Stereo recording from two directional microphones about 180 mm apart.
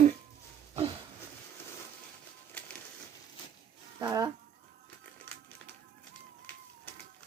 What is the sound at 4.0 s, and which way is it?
Speech, 20° right (ahead or behind).